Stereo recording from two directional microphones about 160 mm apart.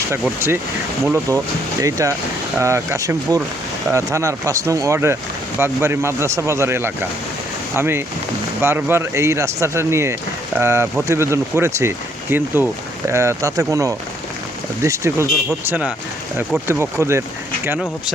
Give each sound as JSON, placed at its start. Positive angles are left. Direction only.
{"t": 0.1, "sound": "speech", "side_deg": -15}